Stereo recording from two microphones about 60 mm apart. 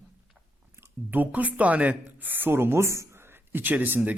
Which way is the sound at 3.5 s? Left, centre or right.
Right.